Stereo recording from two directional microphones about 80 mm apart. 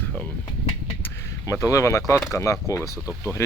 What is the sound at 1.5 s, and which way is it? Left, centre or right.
Speech, left.